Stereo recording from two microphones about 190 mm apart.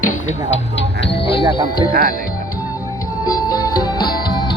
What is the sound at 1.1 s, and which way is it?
Music, 30° left (ahead or behind).